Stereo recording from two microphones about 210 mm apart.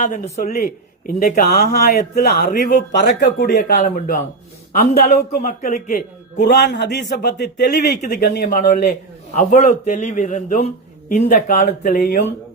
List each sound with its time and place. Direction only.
0.0 s a man's voice: 40° left (ahead or behind)